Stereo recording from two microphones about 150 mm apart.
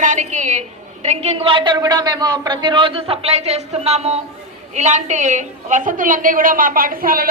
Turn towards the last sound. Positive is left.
turn(degrees=-70)  # may be behind; listen again after turning